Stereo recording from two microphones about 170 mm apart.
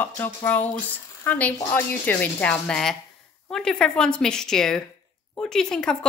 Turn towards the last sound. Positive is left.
turn(degrees=5)  # may be behind; listen again after turning